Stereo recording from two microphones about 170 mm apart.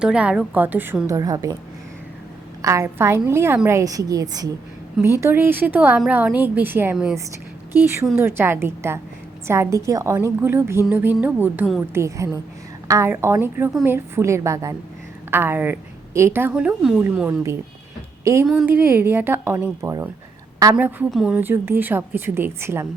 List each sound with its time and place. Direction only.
0.0 s a woman's voice: 5° right (ahead or behind); by 1.5 s 20° right (ahead or behind)
2.6 s a woman's voice: 20° right (ahead or behind)
18.4 s a woman's voice: 5° right (ahead or behind)